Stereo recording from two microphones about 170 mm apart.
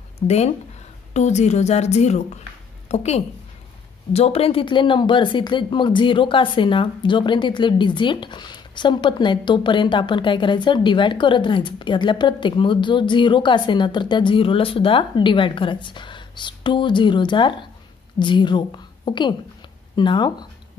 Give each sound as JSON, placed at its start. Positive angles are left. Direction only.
{"t": 0.2, "sound": "a woman's voice", "side_deg": 40}